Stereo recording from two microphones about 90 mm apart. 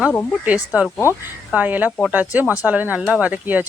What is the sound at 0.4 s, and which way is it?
Speech, 15° right (ahead or behind).